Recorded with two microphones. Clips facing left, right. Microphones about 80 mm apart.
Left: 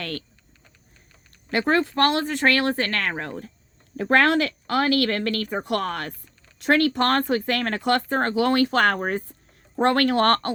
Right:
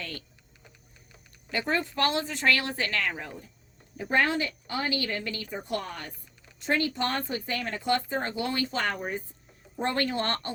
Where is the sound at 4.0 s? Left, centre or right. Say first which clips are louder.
Left 7 dB; left.